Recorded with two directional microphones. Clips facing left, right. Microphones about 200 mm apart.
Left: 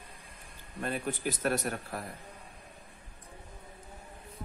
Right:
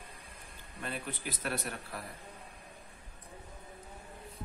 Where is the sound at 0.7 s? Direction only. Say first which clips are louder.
Left 6 dB; 45° left (ahead or behind).